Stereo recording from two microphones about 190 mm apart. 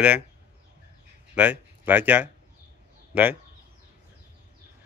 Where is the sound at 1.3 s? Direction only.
10° right (ahead or behind).